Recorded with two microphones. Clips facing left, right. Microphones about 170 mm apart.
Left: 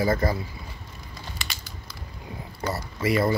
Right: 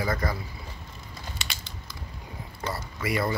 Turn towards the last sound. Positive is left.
turn(degrees=25)  # may be behind; listen again after turning